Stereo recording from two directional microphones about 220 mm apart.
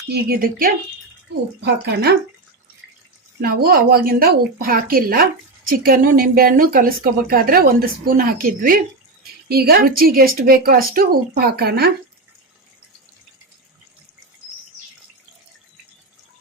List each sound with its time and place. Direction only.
0.1 s speech: 45° right (ahead or behind)
3.4 s speech: 45° right (ahead or behind)